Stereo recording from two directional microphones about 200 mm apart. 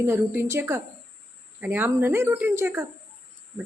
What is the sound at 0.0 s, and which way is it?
Speech, 15° right (ahead or behind).